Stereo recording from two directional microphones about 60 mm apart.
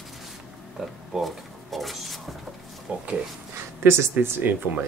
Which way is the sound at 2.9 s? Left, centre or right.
Right.